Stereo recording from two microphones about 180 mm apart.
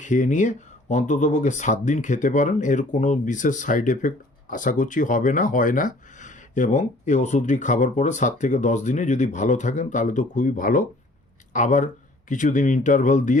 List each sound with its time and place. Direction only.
0.0 s speech: 45° left (ahead or behind)